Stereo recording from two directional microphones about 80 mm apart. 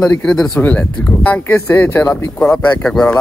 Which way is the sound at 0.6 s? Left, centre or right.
Left.